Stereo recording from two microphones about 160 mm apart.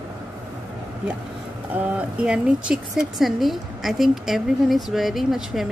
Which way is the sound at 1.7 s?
10° right (ahead or behind).